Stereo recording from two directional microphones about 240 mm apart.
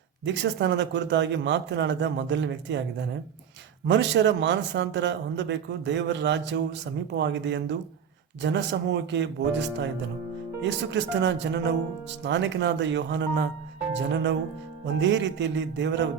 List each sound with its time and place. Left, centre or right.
0.6 s a man's voice: right
3.8 s a man's voice: right